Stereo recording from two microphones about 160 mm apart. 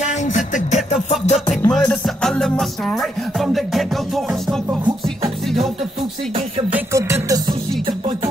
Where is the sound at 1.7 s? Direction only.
5° left (ahead or behind).